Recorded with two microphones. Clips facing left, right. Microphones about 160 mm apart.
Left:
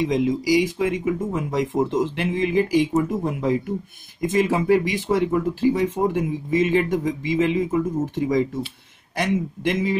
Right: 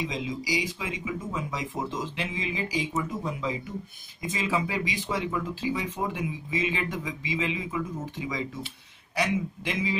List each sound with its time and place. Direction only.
0.0 s speech: 55° left (ahead or behind)